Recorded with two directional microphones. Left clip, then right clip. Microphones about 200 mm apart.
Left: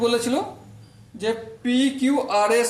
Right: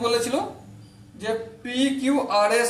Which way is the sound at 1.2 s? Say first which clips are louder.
Left 2 dB; 40° left (ahead or behind).